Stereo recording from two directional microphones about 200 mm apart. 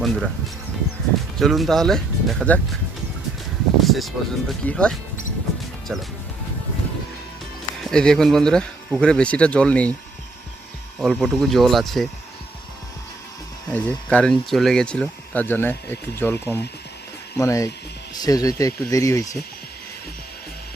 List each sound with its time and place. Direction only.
0.0 s speech: centre (ahead or behind)
1.4 s speech: centre (ahead or behind)
3.8 s speech: centre (ahead or behind)
7.8 s speech: 5° left (ahead or behind)
11.0 s speech: centre (ahead or behind)
13.7 s speech: 10° left (ahead or behind)